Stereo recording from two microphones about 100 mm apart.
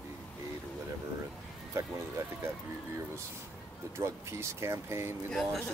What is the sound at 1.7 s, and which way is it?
Speech, 30° right (ahead or behind).